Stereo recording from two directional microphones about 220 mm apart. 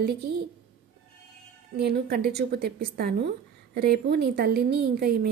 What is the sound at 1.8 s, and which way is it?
A woman's voice, 45° right (ahead or behind).